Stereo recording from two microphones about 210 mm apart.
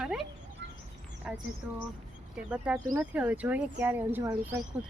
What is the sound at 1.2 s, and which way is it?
Speech, centre (ahead or behind).